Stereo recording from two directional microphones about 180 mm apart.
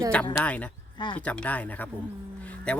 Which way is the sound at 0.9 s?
25° left (ahead or behind).